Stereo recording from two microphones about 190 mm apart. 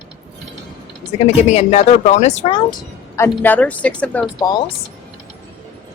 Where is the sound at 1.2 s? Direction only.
35° left (ahead or behind).